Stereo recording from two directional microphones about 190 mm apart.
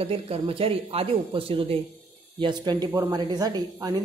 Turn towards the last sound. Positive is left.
turn(degrees=-20)  # may be behind; listen again after turning